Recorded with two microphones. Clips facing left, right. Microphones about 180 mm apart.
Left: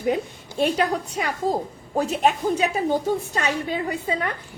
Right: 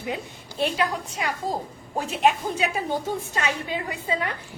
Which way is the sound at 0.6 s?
45° left (ahead or behind).